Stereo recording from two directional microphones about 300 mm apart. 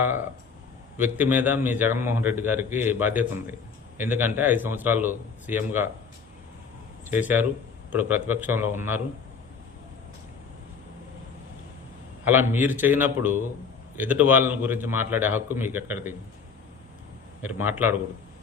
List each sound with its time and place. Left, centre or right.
0.9 s a man's voice: centre
7.1 s a man's voice: centre
12.2 s a man's voice: centre
17.4 s a man's voice: centre